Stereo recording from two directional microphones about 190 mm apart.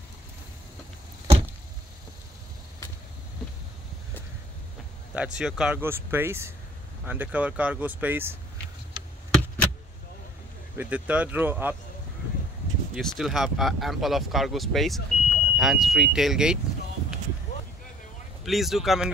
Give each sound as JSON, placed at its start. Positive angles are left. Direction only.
{"t": 5.1, "sound": "speech", "side_deg": -5}
{"t": 10.8, "sound": "speech", "side_deg": -5}
{"t": 12.9, "sound": "speech", "side_deg": 0}
{"t": 18.4, "sound": "speech", "side_deg": 0}